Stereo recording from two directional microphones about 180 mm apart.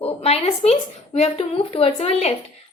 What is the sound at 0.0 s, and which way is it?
A woman's voice, 35° left (ahead or behind).